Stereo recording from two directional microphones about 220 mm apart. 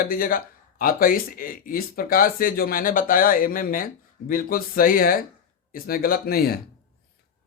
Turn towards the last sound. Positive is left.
turn(degrees=45)  # may be behind; listen again after turning